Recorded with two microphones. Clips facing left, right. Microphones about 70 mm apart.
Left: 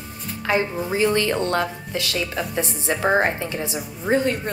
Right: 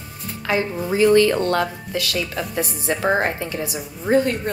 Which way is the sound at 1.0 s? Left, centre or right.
Left.